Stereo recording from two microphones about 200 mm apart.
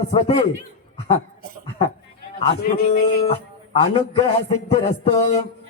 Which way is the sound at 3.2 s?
30° left (ahead or behind).